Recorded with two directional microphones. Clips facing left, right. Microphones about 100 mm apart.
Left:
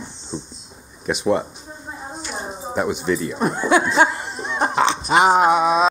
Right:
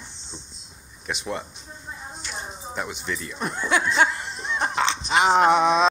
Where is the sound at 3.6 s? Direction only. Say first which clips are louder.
Left 4 dB; 10° left (ahead or behind).